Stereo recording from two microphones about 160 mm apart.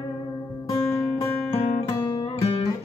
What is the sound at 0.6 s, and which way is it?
Music, 15° left (ahead or behind).